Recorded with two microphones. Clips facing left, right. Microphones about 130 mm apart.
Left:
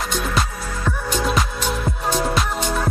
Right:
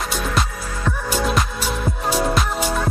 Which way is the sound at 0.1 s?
Centre (ahead or behind).